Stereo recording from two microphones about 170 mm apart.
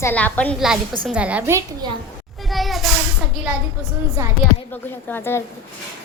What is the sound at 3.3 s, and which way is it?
Speech, 5° right (ahead or behind).